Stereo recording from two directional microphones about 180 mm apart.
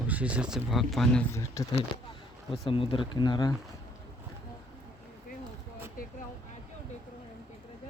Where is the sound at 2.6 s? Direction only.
30° left (ahead or behind).